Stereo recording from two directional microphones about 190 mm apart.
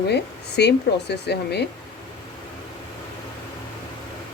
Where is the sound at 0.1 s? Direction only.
60° left (ahead or behind).